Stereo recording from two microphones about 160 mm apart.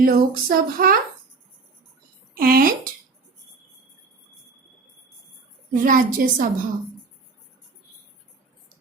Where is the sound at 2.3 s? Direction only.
65° right (ahead or behind).